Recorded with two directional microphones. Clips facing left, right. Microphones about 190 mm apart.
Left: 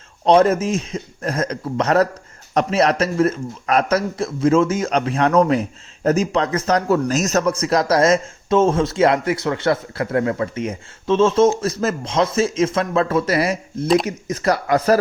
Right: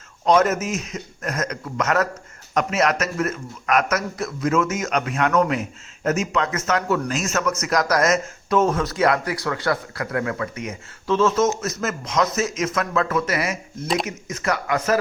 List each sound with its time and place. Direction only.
0.3 s a man's voice: 30° left (ahead or behind)
13.8 s speech: centre (ahead or behind)
14.3 s a man's voice: 30° left (ahead or behind)